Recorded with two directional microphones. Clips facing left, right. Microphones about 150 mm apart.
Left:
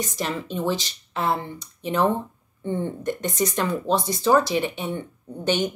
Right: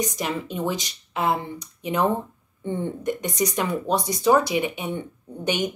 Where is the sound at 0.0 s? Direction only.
15° right (ahead or behind).